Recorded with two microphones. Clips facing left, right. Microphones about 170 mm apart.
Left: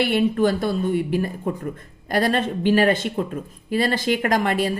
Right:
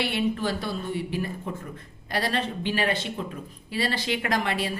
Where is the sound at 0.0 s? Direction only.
45° left (ahead or behind).